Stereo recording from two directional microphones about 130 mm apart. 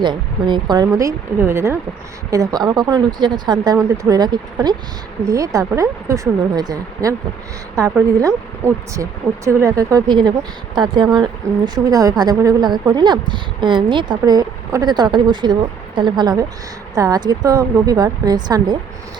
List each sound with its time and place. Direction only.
0.0 s speech: 35° right (ahead or behind)